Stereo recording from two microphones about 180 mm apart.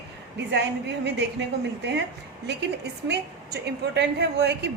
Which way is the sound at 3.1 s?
70° right (ahead or behind).